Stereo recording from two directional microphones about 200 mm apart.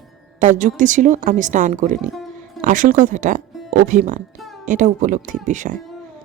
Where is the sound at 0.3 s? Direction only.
40° right (ahead or behind).